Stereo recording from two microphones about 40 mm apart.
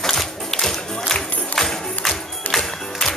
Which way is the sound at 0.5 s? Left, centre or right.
Centre.